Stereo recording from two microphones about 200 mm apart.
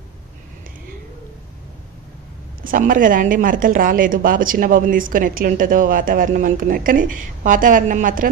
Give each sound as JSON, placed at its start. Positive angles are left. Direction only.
{"t": 2.6, "sound": "speech", "side_deg": -45}